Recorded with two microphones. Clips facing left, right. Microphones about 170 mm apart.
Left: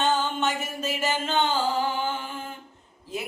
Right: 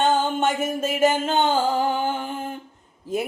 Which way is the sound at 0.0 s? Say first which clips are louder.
Right 4 dB; 50° right (ahead or behind).